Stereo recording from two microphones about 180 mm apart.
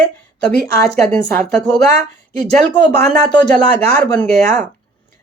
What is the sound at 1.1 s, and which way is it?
Speech, 5° left (ahead or behind).